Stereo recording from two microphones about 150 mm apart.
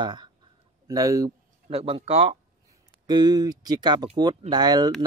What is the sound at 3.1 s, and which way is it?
Speech, 25° right (ahead or behind).